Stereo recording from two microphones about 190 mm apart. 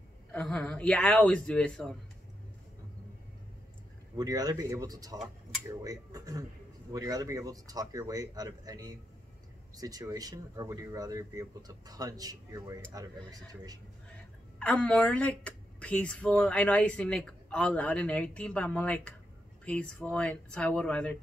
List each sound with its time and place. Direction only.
0.3 s speech: 5° left (ahead or behind)
4.2 s speech: 20° right (ahead or behind)
14.6 s a woman's voice: 5° left (ahead or behind)